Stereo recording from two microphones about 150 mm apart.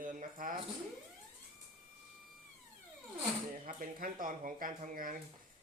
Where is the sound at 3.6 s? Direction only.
70° right (ahead or behind).